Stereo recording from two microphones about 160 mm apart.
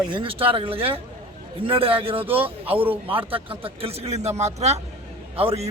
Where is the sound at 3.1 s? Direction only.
35° right (ahead or behind).